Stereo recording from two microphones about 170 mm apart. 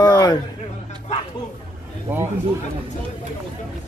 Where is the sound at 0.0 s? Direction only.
20° left (ahead or behind).